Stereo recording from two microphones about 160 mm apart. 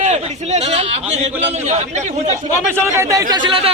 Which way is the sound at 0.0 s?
45° right (ahead or behind).